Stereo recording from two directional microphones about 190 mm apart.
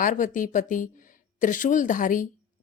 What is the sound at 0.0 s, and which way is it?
Speech, 45° left (ahead or behind).